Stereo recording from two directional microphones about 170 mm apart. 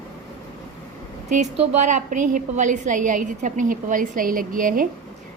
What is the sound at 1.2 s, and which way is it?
A woman's voice, 45° right (ahead or behind).